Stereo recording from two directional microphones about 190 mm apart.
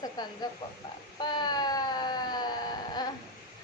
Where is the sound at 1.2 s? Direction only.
20° left (ahead or behind).